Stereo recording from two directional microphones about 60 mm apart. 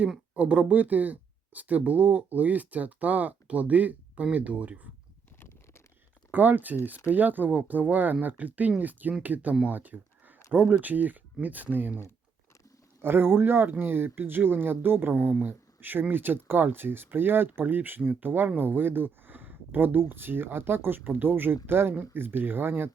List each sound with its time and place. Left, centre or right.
0.3 s speech: right
6.3 s speech: right
9.6 s a sound: right
10.7 s speech: right